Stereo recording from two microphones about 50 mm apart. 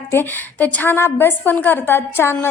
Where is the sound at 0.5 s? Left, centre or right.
Left.